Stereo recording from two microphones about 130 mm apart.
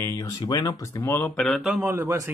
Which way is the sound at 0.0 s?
25° left (ahead or behind).